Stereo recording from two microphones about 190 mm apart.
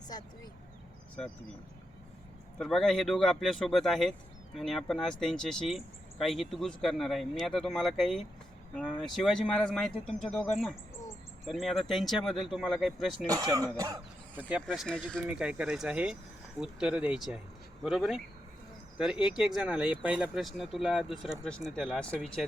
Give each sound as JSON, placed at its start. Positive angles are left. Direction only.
{"t": 2.6, "sound": "speech", "side_deg": 0}
{"t": 13.2, "sound": "speech", "side_deg": -20}
{"t": 14.7, "sound": "speech", "side_deg": 5}